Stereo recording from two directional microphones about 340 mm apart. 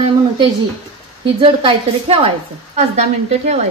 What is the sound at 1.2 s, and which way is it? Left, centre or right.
A woman's voice, centre.